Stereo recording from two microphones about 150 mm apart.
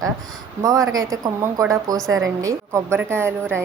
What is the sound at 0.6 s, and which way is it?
A woman's voice, 25° right (ahead or behind).